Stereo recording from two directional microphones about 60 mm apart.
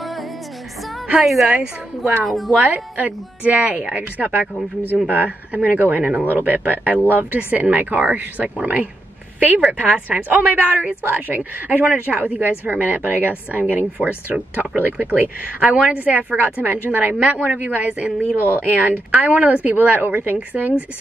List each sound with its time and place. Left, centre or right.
0.0 s music: centre
1.2 s a woman's voice: centre
2.7 s a woman's voice: right